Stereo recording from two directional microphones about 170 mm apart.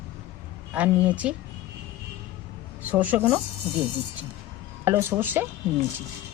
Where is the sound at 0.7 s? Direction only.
10° right (ahead or behind).